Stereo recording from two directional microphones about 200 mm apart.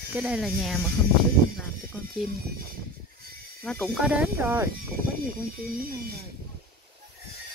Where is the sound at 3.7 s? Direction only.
Centre (ahead or behind).